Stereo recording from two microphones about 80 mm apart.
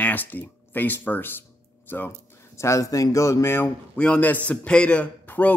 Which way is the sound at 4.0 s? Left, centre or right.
Centre.